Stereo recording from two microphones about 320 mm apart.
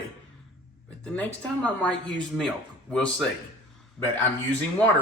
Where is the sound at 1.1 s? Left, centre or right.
Centre.